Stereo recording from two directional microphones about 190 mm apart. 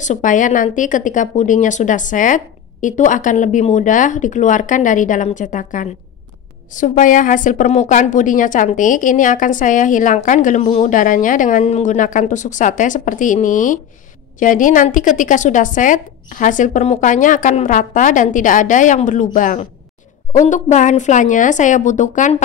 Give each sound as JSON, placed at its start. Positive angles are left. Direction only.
{"t": 0.0, "sound": "a woman's voice", "side_deg": 40}